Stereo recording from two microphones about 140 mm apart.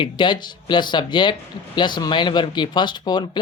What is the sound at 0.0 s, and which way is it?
Speech, 35° left (ahead or behind).